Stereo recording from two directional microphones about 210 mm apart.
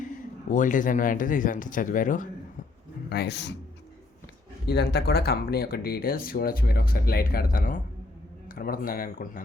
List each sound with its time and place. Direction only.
0.5 s speech: 40° left (ahead or behind)
3.1 s speech: 50° left (ahead or behind)
4.6 s speech: 50° left (ahead or behind)